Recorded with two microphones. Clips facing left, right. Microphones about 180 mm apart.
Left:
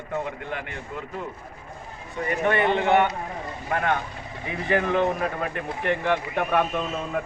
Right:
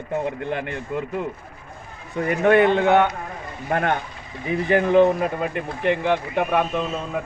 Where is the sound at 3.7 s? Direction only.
50° right (ahead or behind).